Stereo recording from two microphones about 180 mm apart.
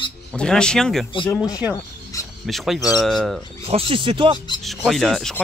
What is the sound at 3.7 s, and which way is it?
Speech, 30° right (ahead or behind).